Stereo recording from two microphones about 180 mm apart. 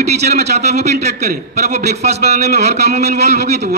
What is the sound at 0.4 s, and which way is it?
A man's voice, 40° right (ahead or behind).